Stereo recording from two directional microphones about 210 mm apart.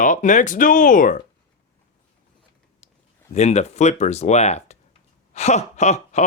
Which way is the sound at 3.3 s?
35° left (ahead or behind).